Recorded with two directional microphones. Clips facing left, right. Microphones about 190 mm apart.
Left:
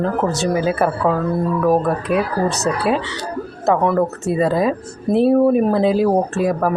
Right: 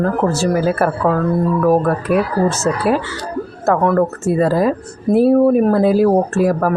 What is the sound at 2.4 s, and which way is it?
Speech, 20° left (ahead or behind).